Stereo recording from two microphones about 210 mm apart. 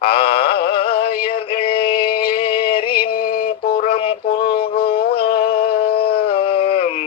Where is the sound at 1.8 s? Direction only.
45° left (ahead or behind).